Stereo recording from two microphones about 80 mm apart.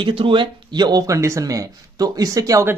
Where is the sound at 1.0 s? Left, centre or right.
Right.